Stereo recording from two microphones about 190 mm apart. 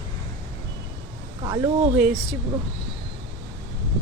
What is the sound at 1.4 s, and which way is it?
Speech, 25° right (ahead or behind).